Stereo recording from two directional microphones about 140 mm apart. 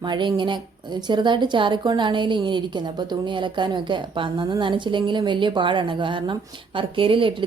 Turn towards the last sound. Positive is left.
turn(degrees=-40)  # may be behind; listen again after turning